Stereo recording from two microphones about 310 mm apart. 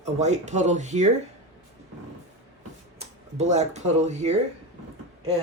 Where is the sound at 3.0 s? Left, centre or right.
Right.